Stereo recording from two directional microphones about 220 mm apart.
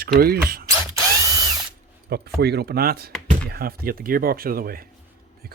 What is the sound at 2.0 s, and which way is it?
Speech, 45° right (ahead or behind).